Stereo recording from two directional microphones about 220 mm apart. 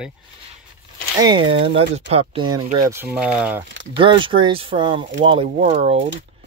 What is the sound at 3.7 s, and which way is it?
Speech, 55° right (ahead or behind).